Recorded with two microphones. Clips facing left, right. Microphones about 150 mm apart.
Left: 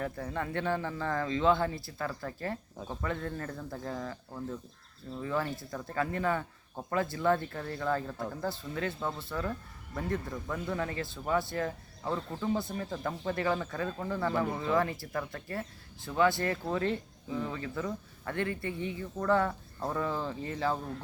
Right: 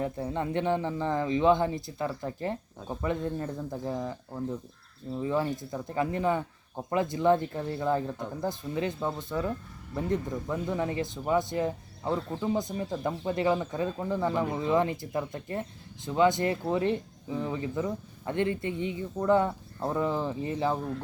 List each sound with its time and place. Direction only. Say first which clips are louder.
0.0 s speech: right 4 dB; 20° right (ahead or behind)